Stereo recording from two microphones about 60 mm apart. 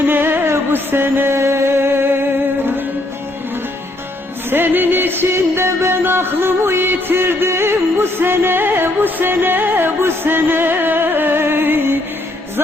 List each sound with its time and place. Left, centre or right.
0.1 s music: right
1.4 s music: right
4.4 s music: right